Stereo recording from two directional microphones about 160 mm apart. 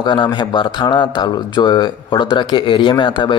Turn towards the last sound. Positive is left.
turn(degrees=30)  # may be behind; listen again after turning